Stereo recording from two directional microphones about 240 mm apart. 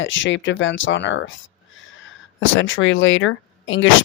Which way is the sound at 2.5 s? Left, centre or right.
Left.